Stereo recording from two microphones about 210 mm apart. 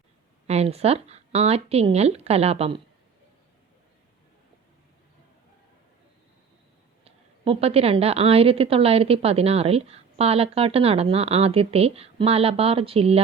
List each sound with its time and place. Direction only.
0.4 s a woman's voice: 30° right (ahead or behind)
7.0 s a woman's voice: 25° right (ahead or behind)